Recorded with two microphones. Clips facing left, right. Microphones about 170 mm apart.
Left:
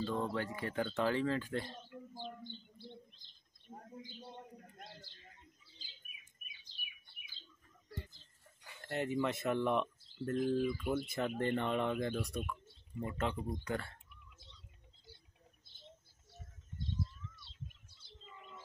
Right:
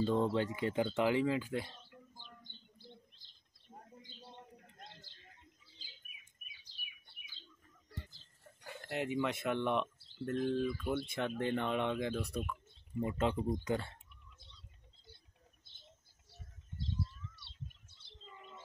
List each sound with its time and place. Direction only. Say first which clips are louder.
0.0 s speech: right 5 dB; 20° right (ahead or behind)
6.7 s bird: left 2 dB; 30° left (ahead or behind)
8.8 s speech: even; 5° right (ahead or behind)
13.0 s speech: right 4 dB; 15° right (ahead or behind)